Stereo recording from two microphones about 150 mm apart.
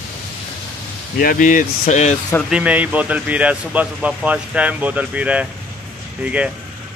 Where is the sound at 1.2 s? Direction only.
65° left (ahead or behind); by 2.1 s 50° left (ahead or behind).